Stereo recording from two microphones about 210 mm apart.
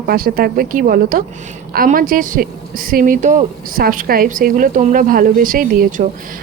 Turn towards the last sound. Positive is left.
turn(degrees=-40)  # may be behind; listen again after turning